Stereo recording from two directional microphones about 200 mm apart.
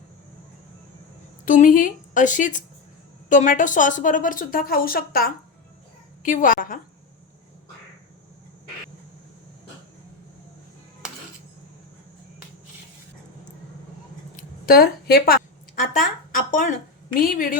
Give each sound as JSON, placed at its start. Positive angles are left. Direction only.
{"t": 1.5, "sound": "a woman's voice", "side_deg": 40}
{"t": 14.3, "sound": "a sound", "side_deg": 50}
{"t": 16.5, "sound": "speech", "side_deg": 40}